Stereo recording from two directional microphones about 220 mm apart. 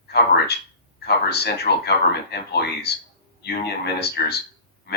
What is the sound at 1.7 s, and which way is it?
Speech, 45° left (ahead or behind).